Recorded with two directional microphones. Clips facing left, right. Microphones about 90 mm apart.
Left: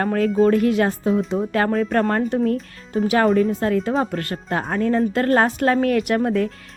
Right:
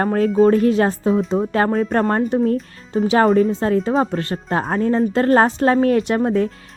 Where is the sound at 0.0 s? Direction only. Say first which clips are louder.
Right 3 dB; 30° right (ahead or behind).